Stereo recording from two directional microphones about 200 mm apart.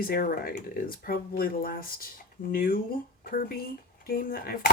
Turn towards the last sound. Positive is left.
turn(degrees=45)  # may be behind; listen again after turning